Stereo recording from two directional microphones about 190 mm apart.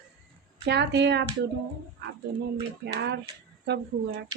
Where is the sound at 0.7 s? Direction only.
65° right (ahead or behind).